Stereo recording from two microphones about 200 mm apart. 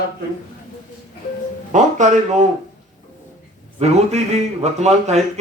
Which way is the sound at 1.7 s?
35° right (ahead or behind).